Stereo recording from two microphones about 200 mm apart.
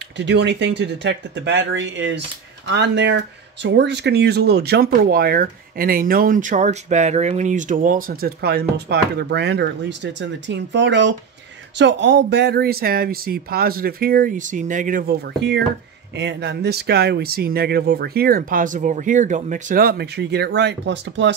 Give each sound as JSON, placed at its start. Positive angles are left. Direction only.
{"t": 0.2, "sound": "speech", "side_deg": -60}
{"t": 16.2, "sound": "speech", "side_deg": -60}